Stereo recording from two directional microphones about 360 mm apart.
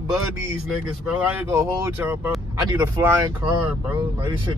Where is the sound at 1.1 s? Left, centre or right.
Centre.